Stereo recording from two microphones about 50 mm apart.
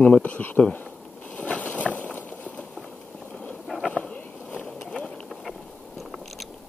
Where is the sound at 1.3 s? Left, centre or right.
Left.